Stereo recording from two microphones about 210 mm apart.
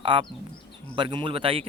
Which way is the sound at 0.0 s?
25° right (ahead or behind).